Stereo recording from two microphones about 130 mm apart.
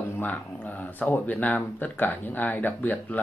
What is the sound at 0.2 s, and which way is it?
Speech, 15° left (ahead or behind).